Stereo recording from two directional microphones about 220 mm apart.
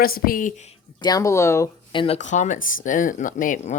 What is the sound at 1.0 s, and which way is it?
Speech, 15° left (ahead or behind).